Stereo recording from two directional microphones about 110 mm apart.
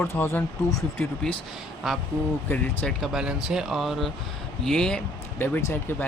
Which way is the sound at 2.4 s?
15° left (ahead or behind).